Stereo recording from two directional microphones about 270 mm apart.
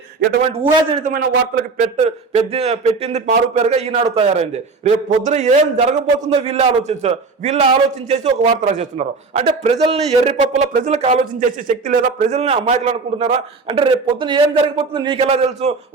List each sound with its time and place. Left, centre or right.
0.2 s a man's voice: right
1.8 s a man's voice: right